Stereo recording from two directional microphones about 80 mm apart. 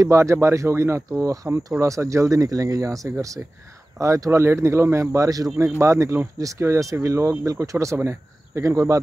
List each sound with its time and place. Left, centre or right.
0.0 s speech: right